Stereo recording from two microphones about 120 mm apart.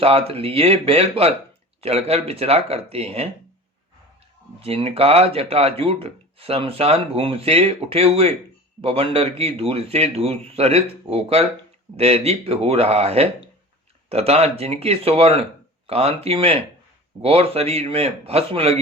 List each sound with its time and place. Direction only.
0.0 s speech: 55° right (ahead or behind)
4.6 s speech: 55° right (ahead or behind)